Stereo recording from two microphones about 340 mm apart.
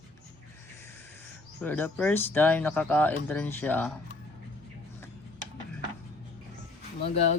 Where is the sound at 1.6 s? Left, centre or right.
Centre.